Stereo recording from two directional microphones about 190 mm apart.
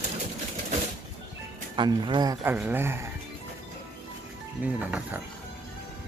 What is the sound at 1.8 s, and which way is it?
Speech, 25° right (ahead or behind).